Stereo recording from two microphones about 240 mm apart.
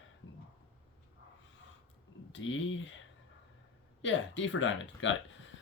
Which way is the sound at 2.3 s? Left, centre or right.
Left.